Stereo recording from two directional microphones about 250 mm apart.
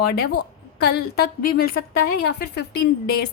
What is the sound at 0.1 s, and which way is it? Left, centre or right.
A woman's voice, left.